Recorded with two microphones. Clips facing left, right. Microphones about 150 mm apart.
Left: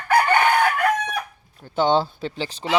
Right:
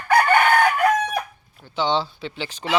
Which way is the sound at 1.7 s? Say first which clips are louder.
Left 3 dB; 50° left (ahead or behind).